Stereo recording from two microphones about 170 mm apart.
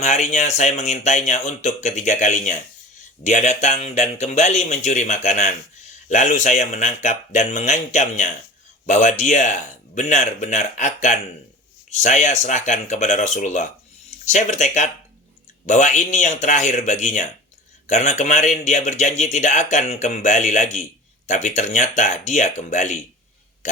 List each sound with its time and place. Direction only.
0.0 s a man's voice: 40° left (ahead or behind)